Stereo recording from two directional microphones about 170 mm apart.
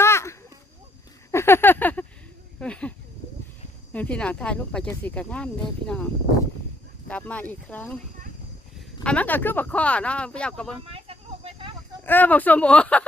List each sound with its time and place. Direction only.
0.0 s a sound: 15° left (ahead or behind)
3.9 s speech: 10° left (ahead or behind)
7.1 s speech: 10° left (ahead or behind)
9.0 s speech: 10° left (ahead or behind)
10.9 s a sound: 35° right (ahead or behind)
12.0 s speech: 10° left (ahead or behind)